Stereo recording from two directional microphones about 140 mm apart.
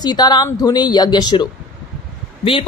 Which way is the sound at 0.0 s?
30° left (ahead or behind).